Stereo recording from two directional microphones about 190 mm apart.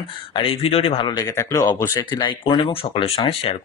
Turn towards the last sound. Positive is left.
turn(degrees=30)  # may be behind; listen again after turning